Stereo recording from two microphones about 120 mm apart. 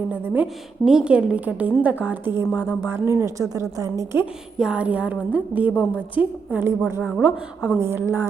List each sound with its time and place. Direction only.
0.9 s a woman's voice: 5° right (ahead or behind); by 4.2 s 25° right (ahead or behind)
4.5 s a woman's voice: 5° right (ahead or behind)
7.8 s a woman's voice: 20° right (ahead or behind)